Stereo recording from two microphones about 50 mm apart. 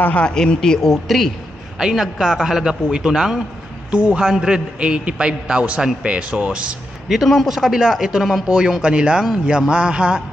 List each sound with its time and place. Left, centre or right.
0.0 s speech: left
0.8 s speech: centre
1.8 s a man's voice: centre
3.9 s a man's voice: right
4.3 s a man's voice: centre
4.7 s a man's voice: right
7.1 s a man's voice: centre; by 10.2 s right